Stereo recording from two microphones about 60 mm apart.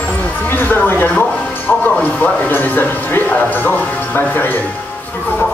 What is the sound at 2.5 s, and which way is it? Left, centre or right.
Speech, left.